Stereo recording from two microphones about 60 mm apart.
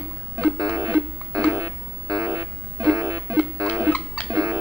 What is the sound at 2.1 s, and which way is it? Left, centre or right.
Vehicle, right.